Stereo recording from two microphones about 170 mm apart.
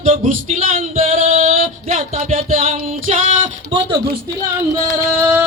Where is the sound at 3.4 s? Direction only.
30° right (ahead or behind).